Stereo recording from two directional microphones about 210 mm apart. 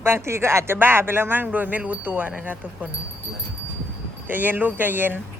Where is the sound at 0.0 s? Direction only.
10° right (ahead or behind).